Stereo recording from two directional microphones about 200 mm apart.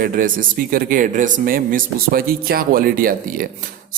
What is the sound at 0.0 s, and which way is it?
A man's voice, 45° right (ahead or behind).